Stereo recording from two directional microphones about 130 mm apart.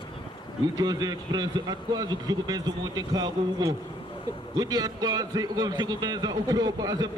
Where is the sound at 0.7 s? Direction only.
30° right (ahead or behind).